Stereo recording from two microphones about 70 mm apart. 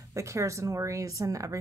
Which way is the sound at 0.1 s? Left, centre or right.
Right.